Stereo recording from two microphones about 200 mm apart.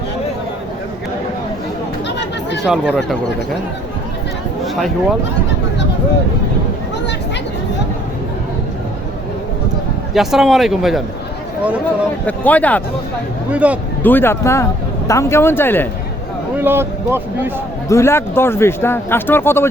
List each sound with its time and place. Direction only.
2.0 s chatter: 60° left (ahead or behind)
2.6 s speech: centre (ahead or behind)
4.6 s a sound: centre (ahead or behind)
10.2 s speech: centre (ahead or behind)
12.2 s speech: 5° left (ahead or behind)
13.5 s speech: 5° right (ahead or behind)
14.0 s speech: 10° left (ahead or behind)
16.6 s speech: 10° right (ahead or behind)
17.8 s speech: 15° left (ahead or behind)